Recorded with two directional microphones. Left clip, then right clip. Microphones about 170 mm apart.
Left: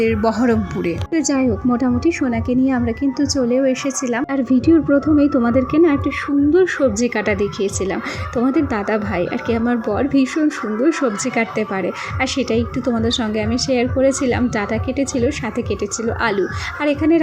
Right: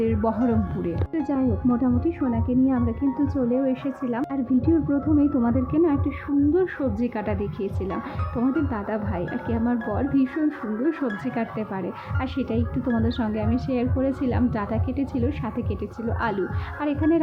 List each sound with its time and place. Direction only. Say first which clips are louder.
0.0 s a woman's voice: left 7 dB; 15° left (ahead or behind)